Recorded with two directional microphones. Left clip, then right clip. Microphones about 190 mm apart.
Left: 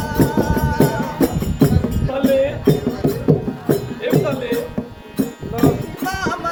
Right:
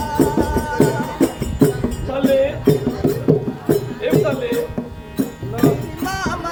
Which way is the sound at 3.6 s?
5° left (ahead or behind).